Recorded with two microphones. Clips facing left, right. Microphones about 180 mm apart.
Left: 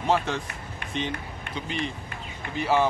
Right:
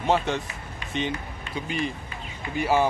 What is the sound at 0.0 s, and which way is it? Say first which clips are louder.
Speech: right 1 dB; centre (ahead or behind).